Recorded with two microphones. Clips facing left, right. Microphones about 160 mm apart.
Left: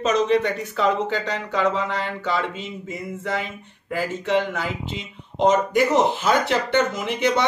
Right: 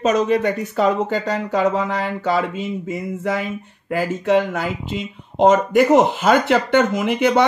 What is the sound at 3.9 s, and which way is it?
Speech, 50° right (ahead or behind).